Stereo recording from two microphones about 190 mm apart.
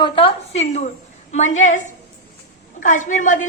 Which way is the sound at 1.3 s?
40° left (ahead or behind).